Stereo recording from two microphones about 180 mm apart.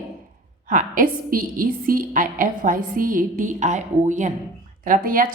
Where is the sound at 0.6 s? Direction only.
50° right (ahead or behind).